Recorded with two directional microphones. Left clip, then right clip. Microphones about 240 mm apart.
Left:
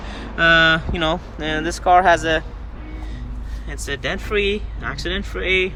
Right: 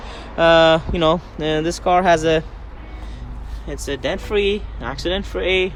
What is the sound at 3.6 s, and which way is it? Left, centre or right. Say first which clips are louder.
Speech: right 2 dB; centre.